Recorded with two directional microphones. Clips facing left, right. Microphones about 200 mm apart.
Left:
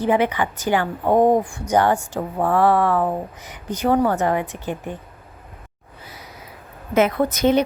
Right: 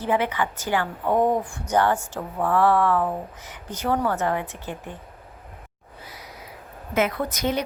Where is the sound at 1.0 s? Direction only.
40° left (ahead or behind).